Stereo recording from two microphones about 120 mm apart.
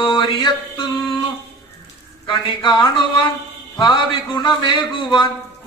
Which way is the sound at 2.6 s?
40° left (ahead or behind).